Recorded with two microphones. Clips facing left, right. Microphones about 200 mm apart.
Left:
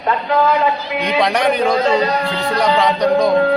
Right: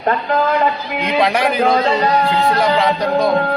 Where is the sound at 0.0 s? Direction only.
50° right (ahead or behind).